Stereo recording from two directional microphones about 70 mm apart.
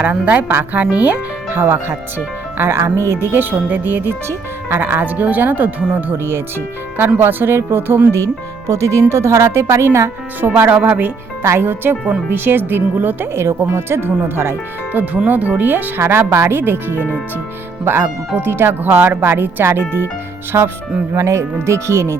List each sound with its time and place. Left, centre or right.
0.0 s speech: right
7.2 s speech: right
8.6 s speech: right
10.4 s speech: right
11.4 s speech: right
13.3 s speech: right
14.9 s speech: right
16.0 s speech: right
20.5 s speech: right